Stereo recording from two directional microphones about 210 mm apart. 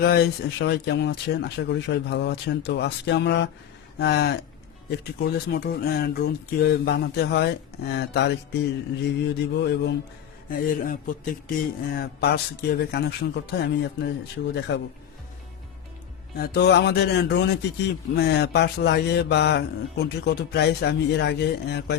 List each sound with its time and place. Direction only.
0.0 s speech: 50° left (ahead or behind)
10.5 s speech: 40° left (ahead or behind)
16.4 s speech: 55° left (ahead or behind)